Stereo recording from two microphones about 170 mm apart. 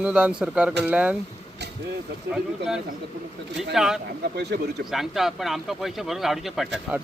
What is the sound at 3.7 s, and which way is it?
Speech, 5° right (ahead or behind).